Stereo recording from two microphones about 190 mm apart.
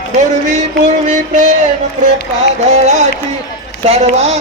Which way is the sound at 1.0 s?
40° right (ahead or behind).